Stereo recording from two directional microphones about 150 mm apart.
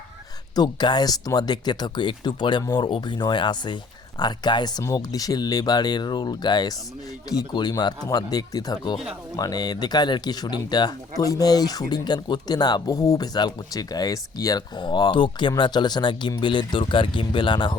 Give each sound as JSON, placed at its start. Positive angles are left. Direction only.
{"t": 0.5, "sound": "speech", "side_deg": 30}